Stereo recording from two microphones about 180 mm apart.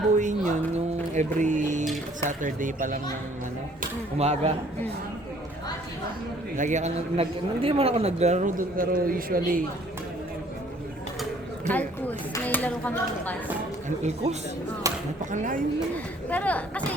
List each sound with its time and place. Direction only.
0.2 s speech: 45° right (ahead or behind)
3.8 s speech: 35° right (ahead or behind)
6.6 s speech: 40° right (ahead or behind)
11.7 s speech: 10° left (ahead or behind)
14.8 s a sound: 20° right (ahead or behind)
15.3 s speech: 45° right (ahead or behind)
16.3 s speech: 10° left (ahead or behind)